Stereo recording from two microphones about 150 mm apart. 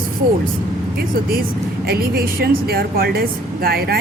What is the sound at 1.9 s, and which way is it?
Speech, 85° right.